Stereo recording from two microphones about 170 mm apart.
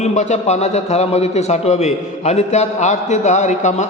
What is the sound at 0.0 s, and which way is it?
A man's voice, 40° left (ahead or behind).